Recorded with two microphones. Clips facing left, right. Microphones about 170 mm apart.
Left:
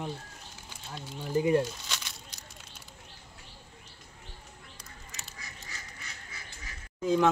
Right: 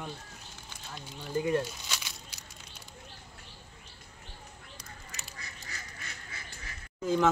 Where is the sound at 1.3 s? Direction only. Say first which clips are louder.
Left 4 dB; 20° left (ahead or behind).